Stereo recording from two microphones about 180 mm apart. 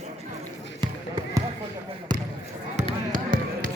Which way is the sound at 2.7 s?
40° right (ahead or behind).